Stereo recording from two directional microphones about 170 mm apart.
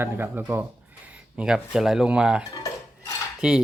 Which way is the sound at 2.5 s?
20° left (ahead or behind).